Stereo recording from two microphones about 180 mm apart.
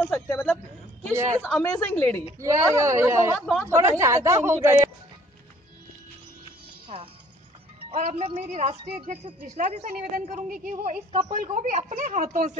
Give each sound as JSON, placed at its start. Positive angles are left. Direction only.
{"t": 0.0, "sound": "speech", "side_deg": 10}
{"t": 1.6, "sound": "a woman's voice", "side_deg": 10}
{"t": 2.3, "sound": "speech", "side_deg": -15}
{"t": 3.3, "sound": "a woman's voice", "side_deg": 5}
{"t": 3.6, "sound": "speech", "side_deg": -15}
{"t": 7.9, "sound": "a woman's voice", "side_deg": -40}